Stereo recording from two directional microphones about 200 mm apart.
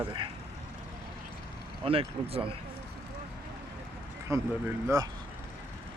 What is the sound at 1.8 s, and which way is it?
Speech, 30° right (ahead or behind).